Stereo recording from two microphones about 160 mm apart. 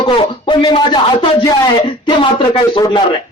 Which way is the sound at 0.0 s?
35° left (ahead or behind).